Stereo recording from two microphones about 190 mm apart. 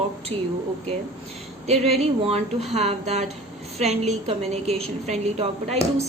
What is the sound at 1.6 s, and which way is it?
A woman's voice, 35° right (ahead or behind).